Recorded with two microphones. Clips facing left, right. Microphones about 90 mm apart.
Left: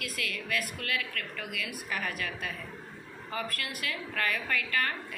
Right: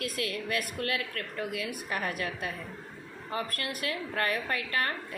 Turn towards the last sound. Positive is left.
turn(degrees=-35)  # may be behind; listen again after turning